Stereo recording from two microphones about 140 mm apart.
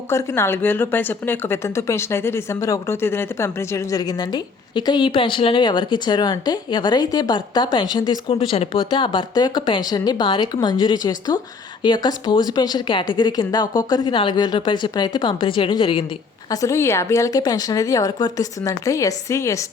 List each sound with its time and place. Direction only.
0.1 s speech: 20° left (ahead or behind); by 16.0 s 40° left (ahead or behind)
16.5 s speech: 25° left (ahead or behind)